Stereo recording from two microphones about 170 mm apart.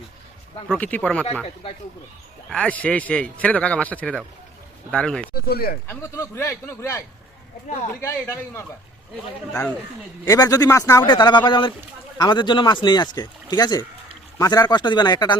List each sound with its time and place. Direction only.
0.7 s a man's voice: 10° left (ahead or behind)
2.5 s a man's voice: 5° left (ahead or behind)
5.3 s speech: 65° left (ahead or behind)
5.9 s a man's voice: 15° left (ahead or behind)
8.0 s a man's voice: 15° left (ahead or behind)
10.2 s speech: 20° left (ahead or behind)